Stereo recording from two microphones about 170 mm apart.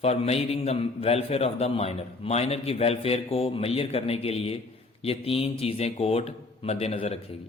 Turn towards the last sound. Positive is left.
turn(degrees=35)  # may be behind; listen again after turning